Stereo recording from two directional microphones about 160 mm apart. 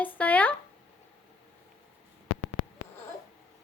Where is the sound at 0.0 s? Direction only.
10° left (ahead or behind).